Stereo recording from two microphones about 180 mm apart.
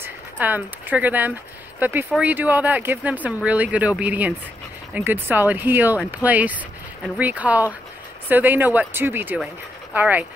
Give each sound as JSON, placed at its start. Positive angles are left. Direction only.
{"t": 0.0, "sound": "speech", "side_deg": -10}